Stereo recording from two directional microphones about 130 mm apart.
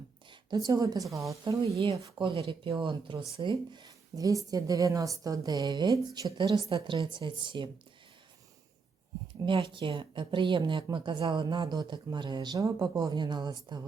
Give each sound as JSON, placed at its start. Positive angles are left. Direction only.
{"t": 0.3, "sound": "a woman's voice", "side_deg": -30}
{"t": 2.1, "sound": "a woman's voice", "side_deg": -40}
{"t": 9.5, "sound": "a woman's voice", "side_deg": -40}